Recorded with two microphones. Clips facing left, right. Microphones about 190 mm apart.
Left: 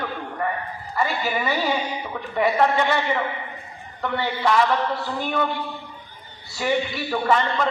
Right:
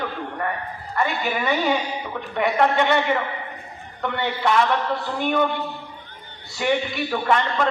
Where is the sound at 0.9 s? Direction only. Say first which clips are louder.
Even; centre (ahead or behind).